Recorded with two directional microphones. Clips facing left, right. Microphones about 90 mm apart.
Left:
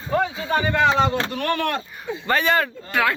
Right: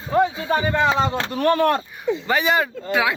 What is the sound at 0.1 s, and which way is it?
Speech, 20° right (ahead or behind).